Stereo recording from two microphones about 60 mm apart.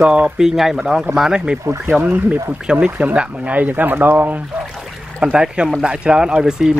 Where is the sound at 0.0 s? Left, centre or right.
Centre.